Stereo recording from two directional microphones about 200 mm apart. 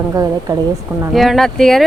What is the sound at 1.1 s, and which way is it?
Speech, centre (ahead or behind).